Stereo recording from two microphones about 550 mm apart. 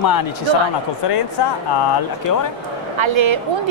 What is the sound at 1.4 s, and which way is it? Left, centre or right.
Speech, left.